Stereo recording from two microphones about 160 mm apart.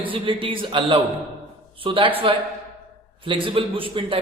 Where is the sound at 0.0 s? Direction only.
35° right (ahead or behind).